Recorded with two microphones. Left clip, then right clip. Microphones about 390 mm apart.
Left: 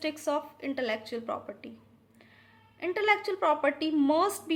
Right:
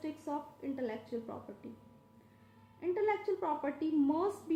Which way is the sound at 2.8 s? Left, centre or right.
Centre.